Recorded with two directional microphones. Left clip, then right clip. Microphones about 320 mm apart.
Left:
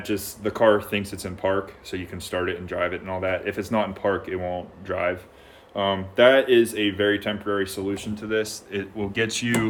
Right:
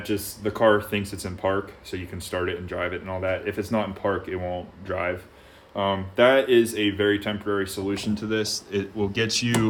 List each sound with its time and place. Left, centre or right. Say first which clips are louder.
0.0 s speech: even; centre
8.0 s speech: right 4 dB; right
8.3 s speech: left 2 dB; centre